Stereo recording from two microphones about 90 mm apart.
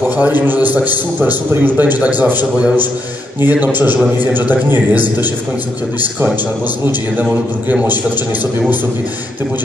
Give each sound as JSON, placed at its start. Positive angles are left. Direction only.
{"t": 0.2, "sound": "a man's voice", "side_deg": -20}
{"t": 7.7, "sound": "a man's voice", "side_deg": -20}